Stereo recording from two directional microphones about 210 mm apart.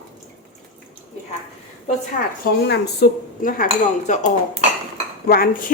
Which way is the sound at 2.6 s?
55° left (ahead or behind).